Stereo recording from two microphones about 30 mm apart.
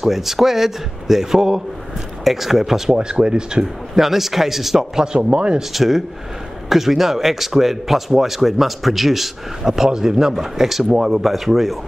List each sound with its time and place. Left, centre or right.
0.0 s speech: centre
2.9 s speech: right
3.9 s speech: centre
5.0 s speech: right
5.6 s speech: centre
9.6 s speech: centre